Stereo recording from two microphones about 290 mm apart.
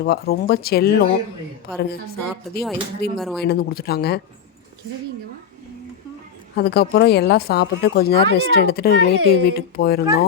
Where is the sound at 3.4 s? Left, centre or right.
Left.